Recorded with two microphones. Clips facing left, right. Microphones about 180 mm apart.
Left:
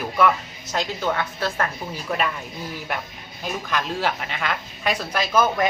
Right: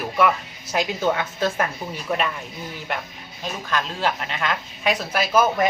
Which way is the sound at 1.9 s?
Centre (ahead or behind).